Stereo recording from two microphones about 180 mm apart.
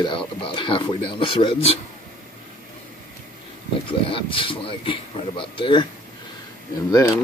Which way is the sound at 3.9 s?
30° left (ahead or behind).